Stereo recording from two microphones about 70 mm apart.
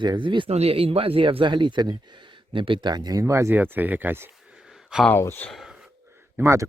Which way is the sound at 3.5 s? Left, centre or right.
Right.